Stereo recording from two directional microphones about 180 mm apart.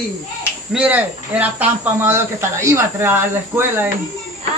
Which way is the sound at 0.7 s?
10° right (ahead or behind).